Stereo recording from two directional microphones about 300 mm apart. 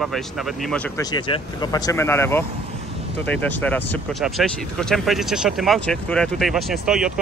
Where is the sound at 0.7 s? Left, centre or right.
Centre.